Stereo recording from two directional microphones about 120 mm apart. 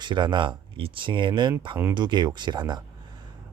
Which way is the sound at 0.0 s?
40° right (ahead or behind).